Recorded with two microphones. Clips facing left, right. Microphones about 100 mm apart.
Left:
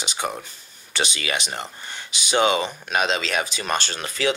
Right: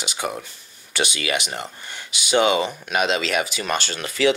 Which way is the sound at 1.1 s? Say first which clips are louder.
Right 3 dB; 30° left (ahead or behind).